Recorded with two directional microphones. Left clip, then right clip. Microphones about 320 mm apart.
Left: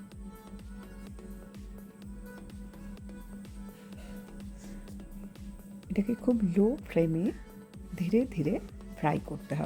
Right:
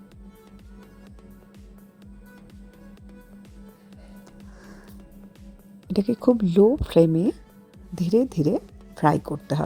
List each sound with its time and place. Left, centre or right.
5.9 s speech: right